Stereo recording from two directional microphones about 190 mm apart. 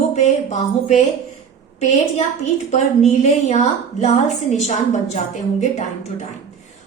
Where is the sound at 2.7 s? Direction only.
35° left (ahead or behind).